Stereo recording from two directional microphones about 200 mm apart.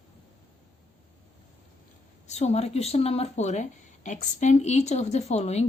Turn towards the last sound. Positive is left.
turn(degrees=35)  # may be behind; listen again after turning